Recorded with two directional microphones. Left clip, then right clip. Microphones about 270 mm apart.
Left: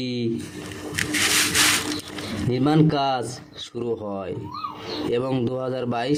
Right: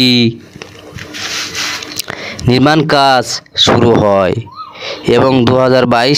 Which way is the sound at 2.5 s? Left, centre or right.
Right.